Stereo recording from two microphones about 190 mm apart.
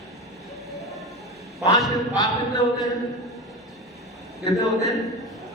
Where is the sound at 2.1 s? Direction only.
20° left (ahead or behind).